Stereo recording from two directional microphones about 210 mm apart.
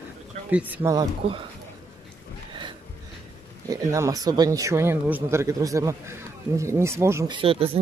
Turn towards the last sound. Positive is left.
turn(degrees=-25)  # may be behind; listen again after turning